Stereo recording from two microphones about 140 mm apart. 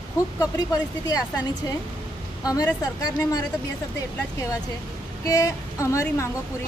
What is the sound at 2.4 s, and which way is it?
A woman's voice, 25° left (ahead or behind).